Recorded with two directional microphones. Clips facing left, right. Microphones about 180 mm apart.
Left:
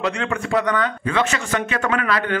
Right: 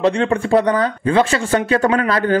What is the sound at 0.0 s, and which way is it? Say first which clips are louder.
A man's voice: right 7 dB; 30° right (ahead or behind).